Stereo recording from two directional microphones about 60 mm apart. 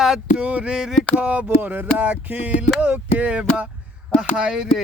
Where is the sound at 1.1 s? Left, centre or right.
Centre.